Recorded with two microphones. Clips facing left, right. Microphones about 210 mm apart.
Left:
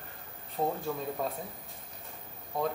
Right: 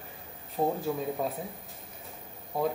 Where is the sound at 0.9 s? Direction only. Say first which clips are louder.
Right 3 dB; 5° right (ahead or behind).